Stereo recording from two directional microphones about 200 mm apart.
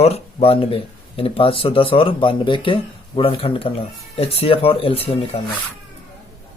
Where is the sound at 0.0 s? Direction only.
30° left (ahead or behind).